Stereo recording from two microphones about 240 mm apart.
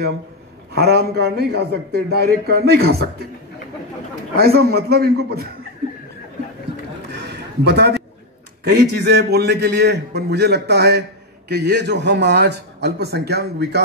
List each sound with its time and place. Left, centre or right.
0.7 s a man's voice: right
4.4 s a man's voice: right
7.1 s a sound: right
8.6 s a man's voice: right